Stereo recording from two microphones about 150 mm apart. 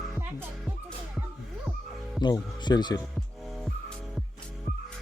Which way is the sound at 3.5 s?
Centre (ahead or behind).